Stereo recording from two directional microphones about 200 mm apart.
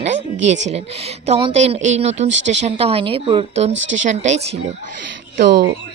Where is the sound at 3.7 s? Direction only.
70° right (ahead or behind).